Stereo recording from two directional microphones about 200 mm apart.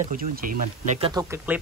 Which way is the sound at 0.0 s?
45° right (ahead or behind).